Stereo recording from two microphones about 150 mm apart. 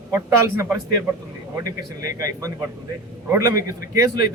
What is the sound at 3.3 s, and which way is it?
Speech, 20° right (ahead or behind).